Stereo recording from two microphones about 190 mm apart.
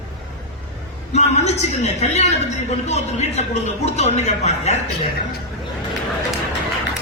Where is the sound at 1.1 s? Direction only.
35° left (ahead or behind).